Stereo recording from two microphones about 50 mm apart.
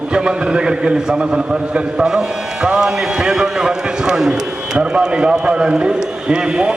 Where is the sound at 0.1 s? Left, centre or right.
Centre.